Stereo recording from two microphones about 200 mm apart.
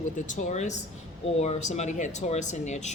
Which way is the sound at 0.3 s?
40° left (ahead or behind).